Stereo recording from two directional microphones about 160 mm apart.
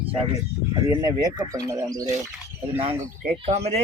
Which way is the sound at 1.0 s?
25° right (ahead or behind).